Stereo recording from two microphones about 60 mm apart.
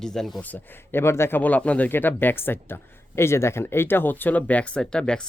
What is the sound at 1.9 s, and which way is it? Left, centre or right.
Speech, left.